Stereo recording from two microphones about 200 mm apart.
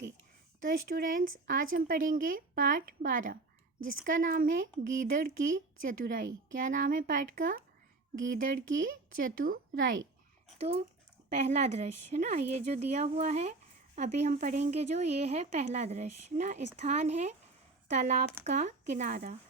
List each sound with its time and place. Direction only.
0.6 s a woman's voice: 45° right (ahead or behind)
10.6 s speech: 30° right (ahead or behind)